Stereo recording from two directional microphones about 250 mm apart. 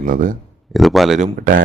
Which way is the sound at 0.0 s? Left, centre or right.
Right.